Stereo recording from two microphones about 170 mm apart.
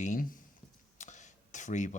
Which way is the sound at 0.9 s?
45° left (ahead or behind).